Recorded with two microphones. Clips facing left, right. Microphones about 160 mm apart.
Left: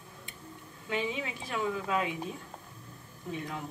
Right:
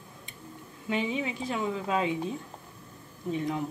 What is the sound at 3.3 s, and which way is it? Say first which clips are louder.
Speech: right 7 dB; 20° right (ahead or behind).